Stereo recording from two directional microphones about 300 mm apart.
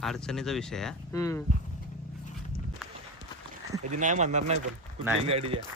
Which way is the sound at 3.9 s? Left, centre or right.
Right.